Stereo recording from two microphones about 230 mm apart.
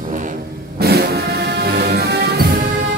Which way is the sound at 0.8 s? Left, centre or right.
Right.